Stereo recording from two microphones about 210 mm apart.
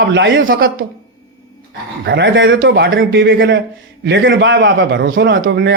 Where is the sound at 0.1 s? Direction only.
60° right (ahead or behind).